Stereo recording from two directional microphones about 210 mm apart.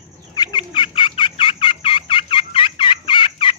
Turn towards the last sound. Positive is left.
turn(degrees=25)  # may be behind; listen again after turning